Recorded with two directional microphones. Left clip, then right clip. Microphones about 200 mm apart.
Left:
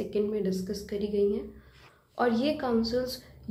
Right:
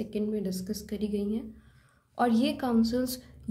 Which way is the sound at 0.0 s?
35° right (ahead or behind).